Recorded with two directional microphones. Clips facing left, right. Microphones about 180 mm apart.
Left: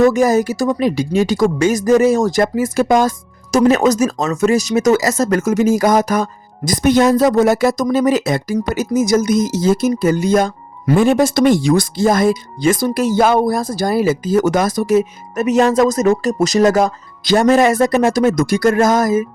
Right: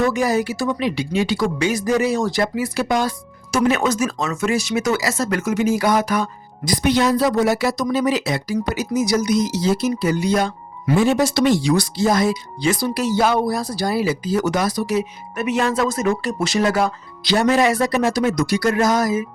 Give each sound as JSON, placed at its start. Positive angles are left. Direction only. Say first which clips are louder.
{"t": 0.0, "sound": "speech", "louder": "left 6 dB", "side_deg": 45}